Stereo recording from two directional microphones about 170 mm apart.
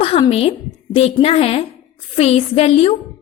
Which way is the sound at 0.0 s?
35° left (ahead or behind).